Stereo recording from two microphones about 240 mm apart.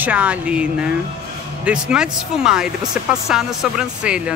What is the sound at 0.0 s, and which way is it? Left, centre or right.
Speech, centre.